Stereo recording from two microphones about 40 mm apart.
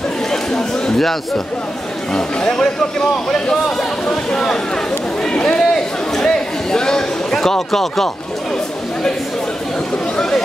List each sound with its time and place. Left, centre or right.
0.3 s chatter: centre
2.1 s a man's voice: centre
5.3 s a sound: left